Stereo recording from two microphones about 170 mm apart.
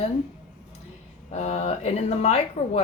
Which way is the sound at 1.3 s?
40° left (ahead or behind).